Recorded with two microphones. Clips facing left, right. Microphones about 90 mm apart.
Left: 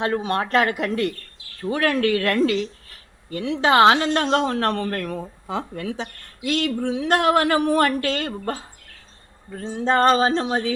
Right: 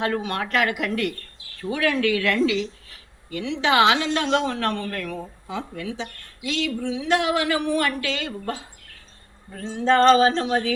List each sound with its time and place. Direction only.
0.0 s speech: 30° left (ahead or behind)
1.7 s a woman's voice: 45° left (ahead or behind)
9.6 s male singing: 25° left (ahead or behind)